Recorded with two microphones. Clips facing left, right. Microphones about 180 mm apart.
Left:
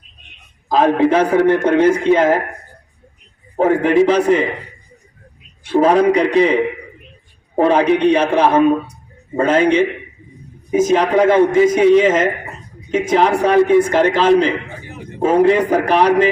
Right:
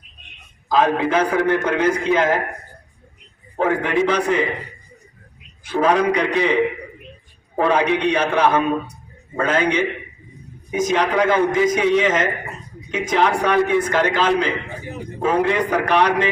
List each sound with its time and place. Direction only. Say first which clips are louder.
0.7 s a man's voice: left 4 dB; 35° left (ahead or behind)
3.6 s a man's voice: left 6 dB; 30° left (ahead or behind)
5.6 s a man's voice: left 5 dB; 30° left (ahead or behind)